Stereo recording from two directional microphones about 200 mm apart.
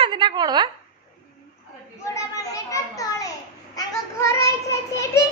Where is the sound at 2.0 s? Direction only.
15° left (ahead or behind).